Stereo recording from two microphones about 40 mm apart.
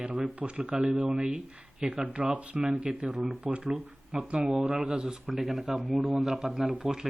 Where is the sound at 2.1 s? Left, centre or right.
Right.